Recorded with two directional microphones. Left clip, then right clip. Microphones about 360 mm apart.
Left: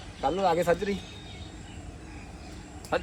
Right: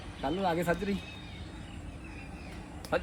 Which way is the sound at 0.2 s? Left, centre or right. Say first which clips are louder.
Left 6 dB; centre.